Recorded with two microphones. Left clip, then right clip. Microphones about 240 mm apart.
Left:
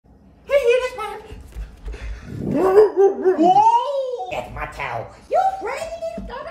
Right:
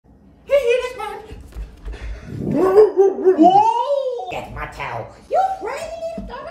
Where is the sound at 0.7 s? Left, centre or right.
Centre.